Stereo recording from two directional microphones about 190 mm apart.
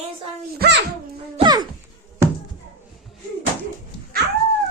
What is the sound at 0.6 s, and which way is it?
Speech, 60° right (ahead or behind).